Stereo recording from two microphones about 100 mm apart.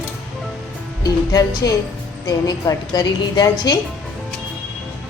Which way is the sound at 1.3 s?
40° left (ahead or behind).